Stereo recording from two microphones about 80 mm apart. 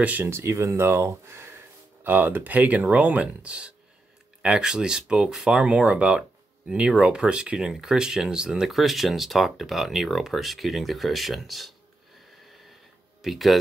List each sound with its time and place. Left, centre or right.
0.0 s speech: centre
0.3 s speech: right; by 11.7 s centre
13.2 s speech: centre